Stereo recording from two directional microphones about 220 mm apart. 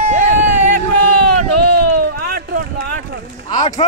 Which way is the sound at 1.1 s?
90° right.